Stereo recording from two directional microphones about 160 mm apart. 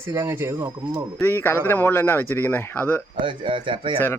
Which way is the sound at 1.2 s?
15° left (ahead or behind).